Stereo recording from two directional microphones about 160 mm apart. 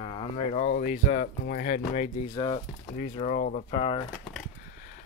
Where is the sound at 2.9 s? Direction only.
45° left (ahead or behind).